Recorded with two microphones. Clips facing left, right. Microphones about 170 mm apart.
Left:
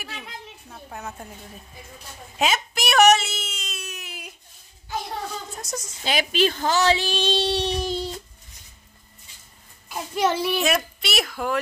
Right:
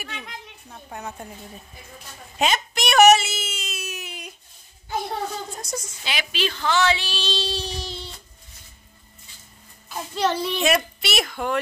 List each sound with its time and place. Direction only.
0.0 s a woman's voice: 5° left (ahead or behind)
2.3 s a sound: 5° left (ahead or behind)
5.6 s speech: centre (ahead or behind)
6.0 s speech: 45° left (ahead or behind); by 7.9 s 65° left (ahead or behind)
9.8 s a child's voice: 10° left (ahead or behind)